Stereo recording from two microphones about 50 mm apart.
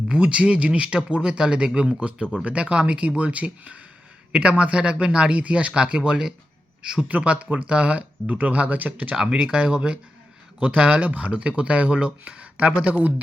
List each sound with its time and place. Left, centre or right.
0.1 s speech: centre
7.1 s speech: right
9.1 s speech: centre